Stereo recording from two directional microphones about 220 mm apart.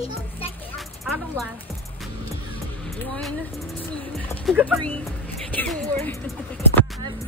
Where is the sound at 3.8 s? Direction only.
10° left (ahead or behind).